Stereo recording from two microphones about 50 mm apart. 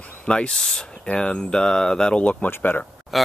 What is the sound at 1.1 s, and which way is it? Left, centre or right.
Speech, left.